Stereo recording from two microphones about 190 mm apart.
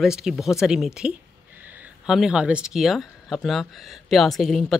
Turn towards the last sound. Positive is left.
turn(degrees=0)  # may be behind; listen again after turning